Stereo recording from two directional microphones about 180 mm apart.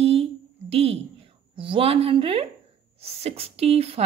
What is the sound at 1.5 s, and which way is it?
Speech, 30° right (ahead or behind).